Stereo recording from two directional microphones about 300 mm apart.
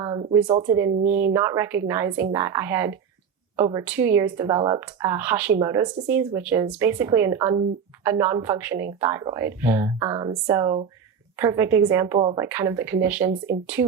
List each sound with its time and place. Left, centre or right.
0.0 s a sound: centre
0.4 s speech: centre
0.9 s speech: right
1.3 s speech: centre